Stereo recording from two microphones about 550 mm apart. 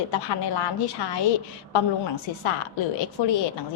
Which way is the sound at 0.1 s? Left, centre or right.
Left.